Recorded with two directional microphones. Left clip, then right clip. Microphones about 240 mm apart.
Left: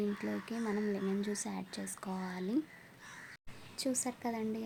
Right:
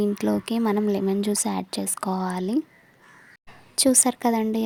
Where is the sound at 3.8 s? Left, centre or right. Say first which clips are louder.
Right 16 dB; right.